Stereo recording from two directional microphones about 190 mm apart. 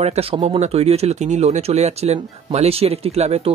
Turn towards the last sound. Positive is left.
turn(degrees=-35)  # may be behind; listen again after turning